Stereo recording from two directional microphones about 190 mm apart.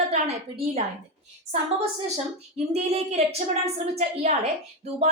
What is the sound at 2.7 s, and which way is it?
A woman's voice, 35° right (ahead or behind).